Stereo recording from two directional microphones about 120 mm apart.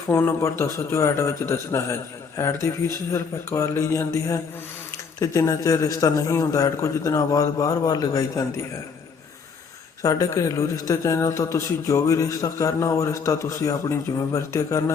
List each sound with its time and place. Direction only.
0.1 s a man's voice: 20° left (ahead or behind)
10.0 s a man's voice: 30° left (ahead or behind)